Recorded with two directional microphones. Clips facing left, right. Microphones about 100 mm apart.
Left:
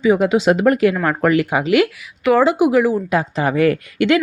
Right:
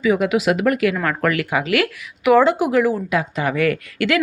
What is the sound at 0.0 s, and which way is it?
Speech, 30° left (ahead or behind).